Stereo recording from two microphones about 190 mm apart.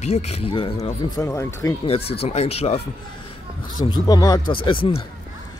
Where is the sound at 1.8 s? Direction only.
30° left (ahead or behind).